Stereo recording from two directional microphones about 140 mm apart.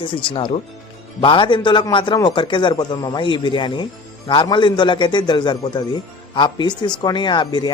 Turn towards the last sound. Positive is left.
turn(degrees=35)  # may be behind; listen again after turning